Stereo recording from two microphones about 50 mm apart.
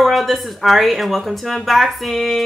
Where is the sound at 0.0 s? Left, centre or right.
Centre.